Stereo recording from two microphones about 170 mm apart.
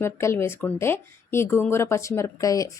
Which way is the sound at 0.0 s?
15° left (ahead or behind).